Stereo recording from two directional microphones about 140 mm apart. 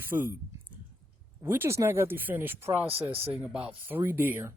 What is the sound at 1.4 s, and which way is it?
Speech, 15° right (ahead or behind).